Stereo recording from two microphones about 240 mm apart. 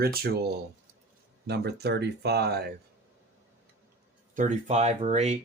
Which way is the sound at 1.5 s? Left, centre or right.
Right.